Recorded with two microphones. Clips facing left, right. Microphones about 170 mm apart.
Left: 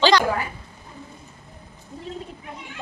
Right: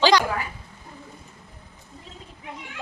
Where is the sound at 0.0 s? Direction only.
15° right (ahead or behind).